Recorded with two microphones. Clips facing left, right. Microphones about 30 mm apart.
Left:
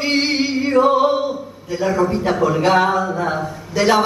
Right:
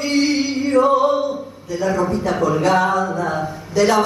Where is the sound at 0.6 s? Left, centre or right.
Left.